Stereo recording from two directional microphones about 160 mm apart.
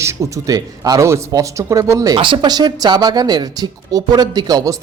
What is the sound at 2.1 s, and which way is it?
Speech, 30° right (ahead or behind).